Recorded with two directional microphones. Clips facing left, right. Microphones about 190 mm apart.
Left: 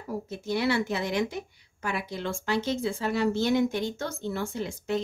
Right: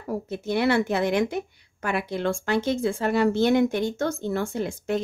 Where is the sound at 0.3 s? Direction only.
55° right (ahead or behind).